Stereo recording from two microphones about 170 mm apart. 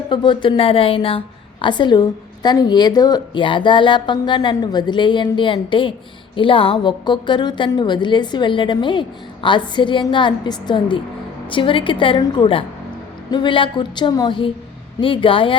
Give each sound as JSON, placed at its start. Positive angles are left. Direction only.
{"t": 0.1, "sound": "a woman's voice", "side_deg": 30}